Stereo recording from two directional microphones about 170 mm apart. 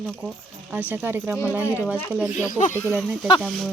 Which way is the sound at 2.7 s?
15° left (ahead or behind).